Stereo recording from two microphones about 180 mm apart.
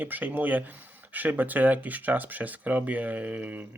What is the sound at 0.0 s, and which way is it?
Speech, 10° right (ahead or behind).